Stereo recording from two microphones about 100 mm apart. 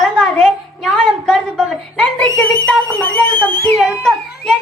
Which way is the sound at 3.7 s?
Centre (ahead or behind).